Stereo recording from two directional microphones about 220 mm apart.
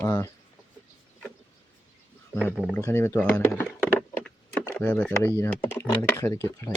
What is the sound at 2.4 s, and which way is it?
Speech, 5° left (ahead or behind).